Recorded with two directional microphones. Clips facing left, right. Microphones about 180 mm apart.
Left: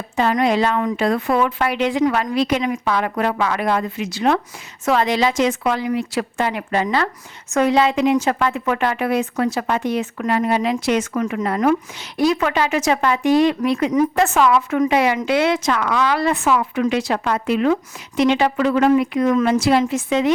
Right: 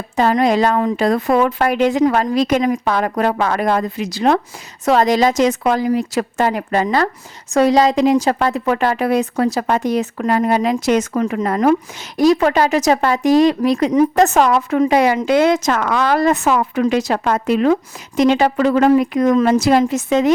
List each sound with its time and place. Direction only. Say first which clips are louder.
0.2 s a woman's voice: right 3 dB; 40° right (ahead or behind)